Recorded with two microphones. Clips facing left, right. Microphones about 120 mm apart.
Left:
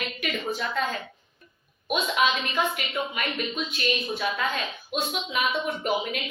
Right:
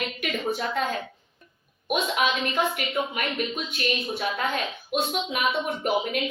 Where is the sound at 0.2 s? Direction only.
50° right (ahead or behind).